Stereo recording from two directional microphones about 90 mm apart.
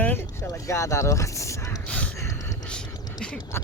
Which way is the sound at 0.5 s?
35° left (ahead or behind).